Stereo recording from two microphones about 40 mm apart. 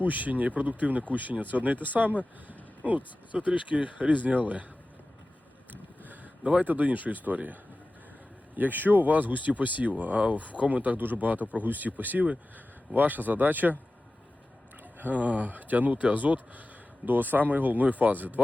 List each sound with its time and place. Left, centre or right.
0.0 s speech: right
6.4 s speech: right
6.7 s speech: right
15.1 s speech: right